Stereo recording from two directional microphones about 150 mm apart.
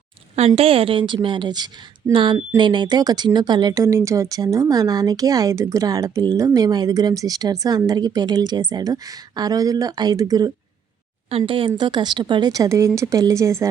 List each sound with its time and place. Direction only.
0.3 s a woman's voice: 45° right (ahead or behind); by 10.5 s 25° right (ahead or behind)
11.3 s a woman's voice: 35° right (ahead or behind); by 13.7 s 20° right (ahead or behind)